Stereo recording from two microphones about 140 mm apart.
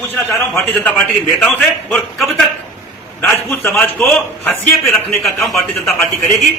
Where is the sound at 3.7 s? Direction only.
5° left (ahead or behind).